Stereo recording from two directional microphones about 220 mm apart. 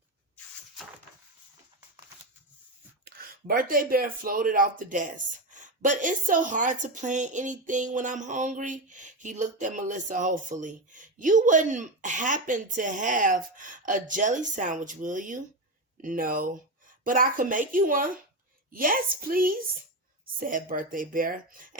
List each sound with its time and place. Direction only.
3.0 s speech: 40° right (ahead or behind)